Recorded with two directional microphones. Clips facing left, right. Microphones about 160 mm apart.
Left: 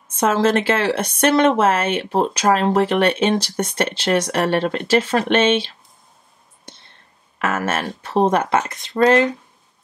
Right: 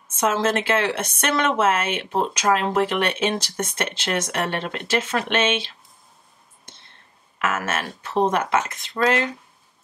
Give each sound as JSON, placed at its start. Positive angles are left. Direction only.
{"t": 0.4, "sound": "speech", "side_deg": 30}
{"t": 7.3, "sound": "speech", "side_deg": 35}